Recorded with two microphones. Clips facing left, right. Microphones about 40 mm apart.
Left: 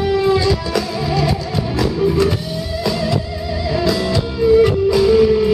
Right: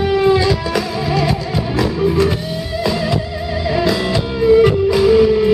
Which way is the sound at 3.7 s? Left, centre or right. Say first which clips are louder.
Right 1 dB; centre.